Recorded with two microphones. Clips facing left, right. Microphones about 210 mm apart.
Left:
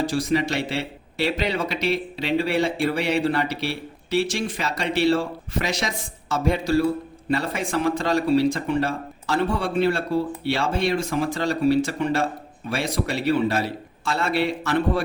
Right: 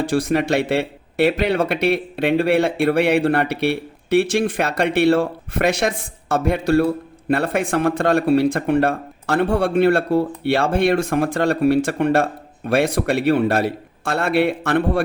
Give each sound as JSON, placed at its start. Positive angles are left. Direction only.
{"t": 0.0, "sound": "speech", "side_deg": -55}